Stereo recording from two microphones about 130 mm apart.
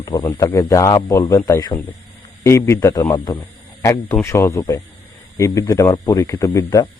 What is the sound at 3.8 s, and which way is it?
Speech, 25° left (ahead or behind).